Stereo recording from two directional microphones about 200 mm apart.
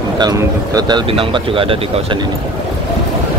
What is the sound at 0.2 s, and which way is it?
Speech, 20° right (ahead or behind).